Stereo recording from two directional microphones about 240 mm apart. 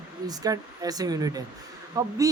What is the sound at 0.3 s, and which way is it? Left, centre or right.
Speech, centre.